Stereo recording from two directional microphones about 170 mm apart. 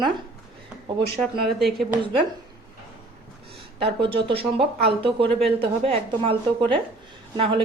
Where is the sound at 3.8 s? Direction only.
30° right (ahead or behind).